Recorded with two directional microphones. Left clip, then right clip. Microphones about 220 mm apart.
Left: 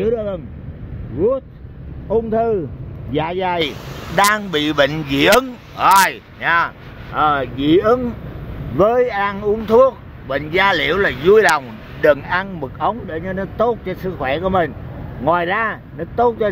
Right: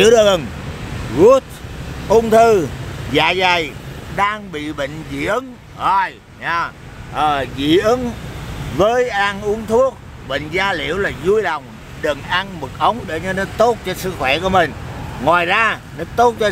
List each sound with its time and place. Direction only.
0.0 s speech: 25° right (ahead or behind)
2.0 s speech: 15° right (ahead or behind); by 3.7 s 5° left (ahead or behind)
4.2 s speech: 15° left (ahead or behind)
6.4 s speech: 5° left (ahead or behind)